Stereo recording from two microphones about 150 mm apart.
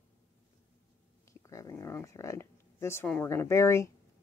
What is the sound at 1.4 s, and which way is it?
Speech, 20° left (ahead or behind).